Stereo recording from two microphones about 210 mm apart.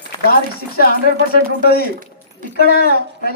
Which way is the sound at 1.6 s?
45° left (ahead or behind).